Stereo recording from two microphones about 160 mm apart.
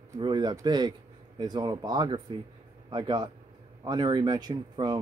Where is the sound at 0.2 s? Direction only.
25° right (ahead or behind).